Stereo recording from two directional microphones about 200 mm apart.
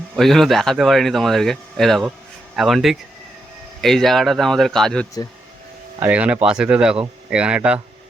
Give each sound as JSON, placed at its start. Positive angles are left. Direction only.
{"t": 0.2, "sound": "speech", "side_deg": 0}